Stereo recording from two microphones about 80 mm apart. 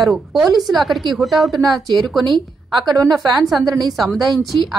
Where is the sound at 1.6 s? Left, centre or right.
Right.